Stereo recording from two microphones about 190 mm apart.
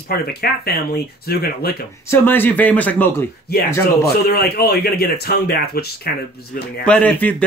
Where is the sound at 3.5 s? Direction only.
55° left (ahead or behind).